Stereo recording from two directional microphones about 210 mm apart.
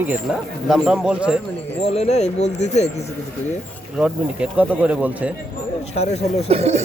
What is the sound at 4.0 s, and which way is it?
Speech, 5° right (ahead or behind).